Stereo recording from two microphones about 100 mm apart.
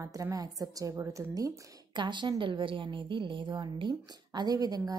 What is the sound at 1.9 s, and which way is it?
A woman's voice, 50° right (ahead or behind).